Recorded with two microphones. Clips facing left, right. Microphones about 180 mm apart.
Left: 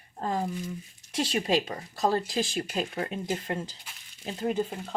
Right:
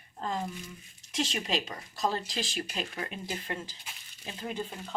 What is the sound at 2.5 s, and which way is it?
Speech, 40° left (ahead or behind).